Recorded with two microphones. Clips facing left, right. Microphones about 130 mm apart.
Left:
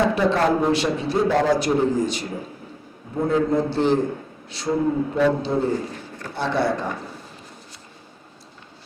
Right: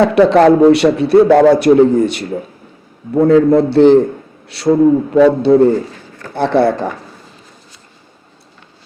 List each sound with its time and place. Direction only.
0.0 s a man's voice: 70° right (ahead or behind)